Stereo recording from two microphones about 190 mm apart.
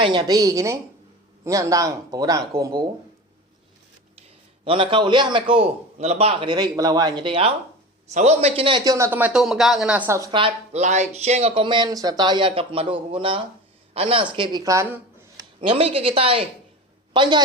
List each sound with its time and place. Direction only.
0.0 s speech: 25° right (ahead or behind)
4.6 s speech: 25° right (ahead or behind); by 10.2 s 10° right (ahead or behind)
10.3 s speech: 30° right (ahead or behind); by 14.9 s 15° right (ahead or behind)
15.4 s speech: 30° right (ahead or behind)